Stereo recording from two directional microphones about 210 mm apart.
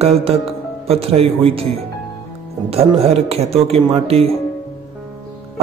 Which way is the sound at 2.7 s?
30° right (ahead or behind).